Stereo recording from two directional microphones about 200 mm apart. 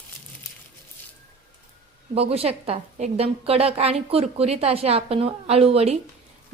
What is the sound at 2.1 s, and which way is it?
A woman's voice, 30° right (ahead or behind).